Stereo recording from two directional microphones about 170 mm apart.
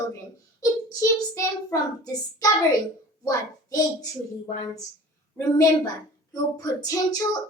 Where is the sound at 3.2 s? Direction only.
20° left (ahead or behind).